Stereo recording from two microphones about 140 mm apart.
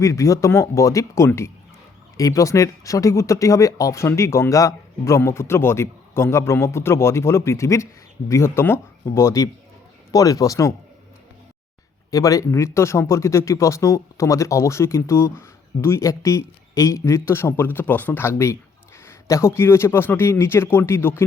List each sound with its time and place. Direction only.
0.0 s speech: 25° left (ahead or behind)
12.1 s speech: 25° left (ahead or behind)